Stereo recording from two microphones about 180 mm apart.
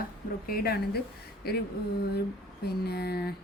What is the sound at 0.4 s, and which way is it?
Speech, 55° left (ahead or behind).